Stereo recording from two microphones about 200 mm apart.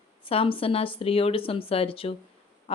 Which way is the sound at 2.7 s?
30° left (ahead or behind).